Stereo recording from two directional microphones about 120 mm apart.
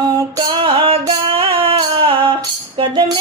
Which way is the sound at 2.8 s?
40° right (ahead or behind).